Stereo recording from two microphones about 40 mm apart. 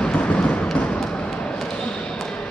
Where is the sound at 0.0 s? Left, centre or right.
Left.